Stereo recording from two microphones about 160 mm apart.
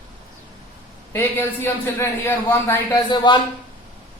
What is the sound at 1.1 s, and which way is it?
A man's voice, 15° left (ahead or behind).